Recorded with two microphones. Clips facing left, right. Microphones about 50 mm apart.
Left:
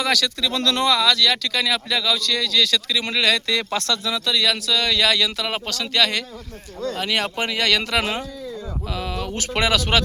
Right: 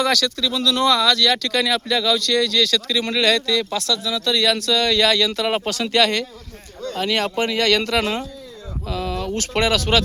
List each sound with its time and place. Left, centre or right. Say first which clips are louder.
0.0 s speech: right 2 dB; centre
0.5 s speech: even; left
0.9 s speech: right 2 dB; centre
2.6 s speech: right 2 dB; centre
3.4 s speech: right 1 dB; left
4.3 s speech: right 3 dB; centre
5.5 s speech: right 5 dB; centre